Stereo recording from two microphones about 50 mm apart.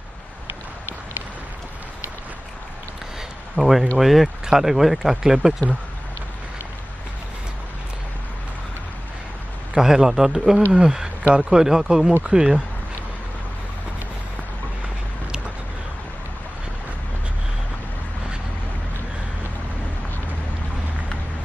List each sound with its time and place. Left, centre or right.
3.5 s speech: centre
9.8 s speech: centre